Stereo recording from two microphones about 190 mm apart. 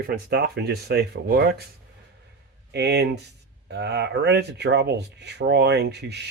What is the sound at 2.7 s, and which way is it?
Speech, 60° right (ahead or behind).